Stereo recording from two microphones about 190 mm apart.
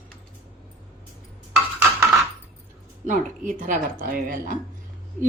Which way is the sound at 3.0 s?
45° right (ahead or behind).